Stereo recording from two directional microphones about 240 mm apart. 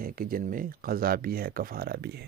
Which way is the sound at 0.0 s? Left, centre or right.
Right.